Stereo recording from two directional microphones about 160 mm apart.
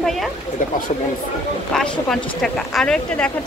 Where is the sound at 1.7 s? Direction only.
5° left (ahead or behind).